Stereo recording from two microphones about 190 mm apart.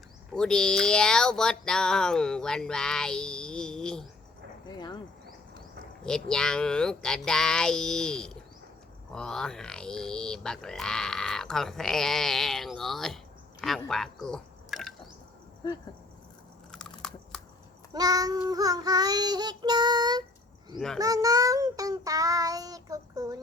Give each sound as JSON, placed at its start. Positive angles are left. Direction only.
{"t": 0.3, "sound": "speech", "side_deg": 5}
{"t": 4.7, "sound": "a sound", "side_deg": 25}
{"t": 6.1, "sound": "speech", "side_deg": 5}
{"t": 13.6, "sound": "a sound", "side_deg": 0}
{"t": 16.7, "sound": "chewing", "side_deg": 5}
{"t": 17.9, "sound": "child singing", "side_deg": -20}
{"t": 20.7, "sound": "speech", "side_deg": 5}
{"t": 21.0, "sound": "child singing", "side_deg": -20}